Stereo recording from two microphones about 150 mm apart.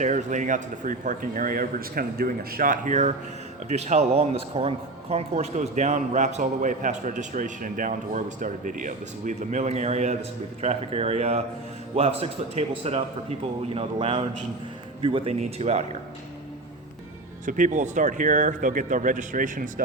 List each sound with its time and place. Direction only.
0.0 s speech: 55° right (ahead or behind)
17.4 s speech: 55° right (ahead or behind)